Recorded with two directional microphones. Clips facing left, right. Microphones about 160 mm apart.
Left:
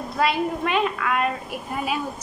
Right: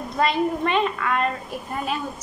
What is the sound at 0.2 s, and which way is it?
Child singing, 5° left (ahead or behind).